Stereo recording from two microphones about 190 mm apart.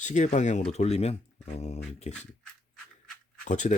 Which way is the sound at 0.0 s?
40° left (ahead or behind).